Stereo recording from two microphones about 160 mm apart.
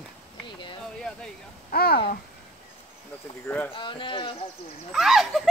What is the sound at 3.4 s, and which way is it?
Speech, 10° left (ahead or behind).